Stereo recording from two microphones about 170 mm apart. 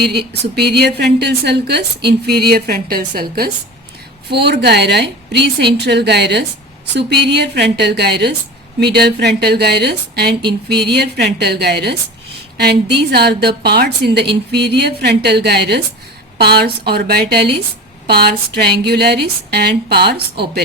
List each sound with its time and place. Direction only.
0.0 s a woman's voice: 75° right (ahead or behind)
4.3 s a woman's voice: 75° right (ahead or behind)
13.1 s a woman's voice: 75° right (ahead or behind)